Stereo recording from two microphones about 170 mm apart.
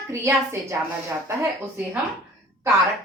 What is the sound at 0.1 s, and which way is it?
Speech, 15° right (ahead or behind).